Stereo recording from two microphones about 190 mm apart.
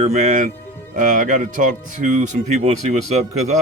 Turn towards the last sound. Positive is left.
turn(degrees=-35)  # may be behind; listen again after turning